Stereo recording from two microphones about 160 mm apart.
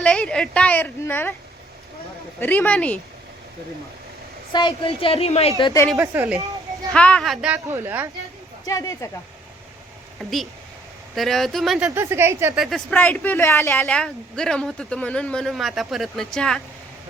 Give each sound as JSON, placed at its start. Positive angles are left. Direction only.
{"t": 0.0, "sound": "a woman's voice", "side_deg": 5}
{"t": 2.4, "sound": "speech", "side_deg": 10}
{"t": 4.5, "sound": "a woman's voice", "side_deg": 30}
{"t": 6.0, "sound": "a woman's voice", "side_deg": -10}
{"t": 6.9, "sound": "speech", "side_deg": 5}
{"t": 7.7, "sound": "a woman's voice", "side_deg": -15}
{"t": 8.6, "sound": "speech", "side_deg": 20}
{"t": 10.2, "sound": "speech", "side_deg": 0}
{"t": 11.9, "sound": "a woman's voice", "side_deg": -15}
{"t": 12.5, "sound": "speech", "side_deg": 0}